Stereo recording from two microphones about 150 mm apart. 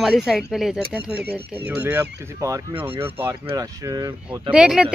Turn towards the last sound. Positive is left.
turn(degrees=-5)  # may be behind; listen again after turning